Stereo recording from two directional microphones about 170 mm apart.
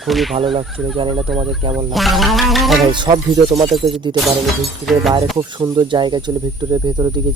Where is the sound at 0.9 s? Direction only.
35° right (ahead or behind).